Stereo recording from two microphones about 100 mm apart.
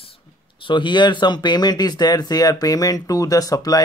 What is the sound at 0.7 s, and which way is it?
Speech, 50° left (ahead or behind).